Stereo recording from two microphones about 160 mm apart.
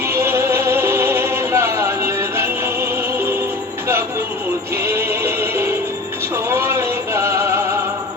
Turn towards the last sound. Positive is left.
turn(degrees=-15)  # may be behind; listen again after turning